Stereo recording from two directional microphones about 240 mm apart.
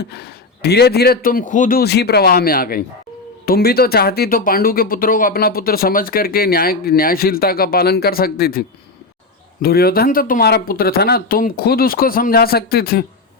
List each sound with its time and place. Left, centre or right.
0.0 s speech: left